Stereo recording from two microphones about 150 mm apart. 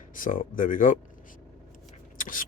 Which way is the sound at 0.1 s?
60° left (ahead or behind).